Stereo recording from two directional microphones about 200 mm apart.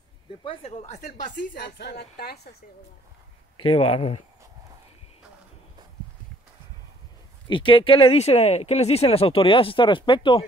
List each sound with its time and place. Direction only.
0.4 s speech: 30° left (ahead or behind)
1.5 s a woman's voice: 55° left (ahead or behind)
3.5 s speech: 25° left (ahead or behind)
7.4 s speech: 25° left (ahead or behind)